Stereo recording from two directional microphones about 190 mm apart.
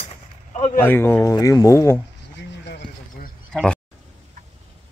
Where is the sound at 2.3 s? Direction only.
60° left (ahead or behind).